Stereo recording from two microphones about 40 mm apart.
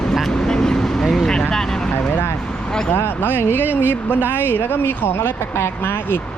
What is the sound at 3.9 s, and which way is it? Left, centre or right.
Speech, left.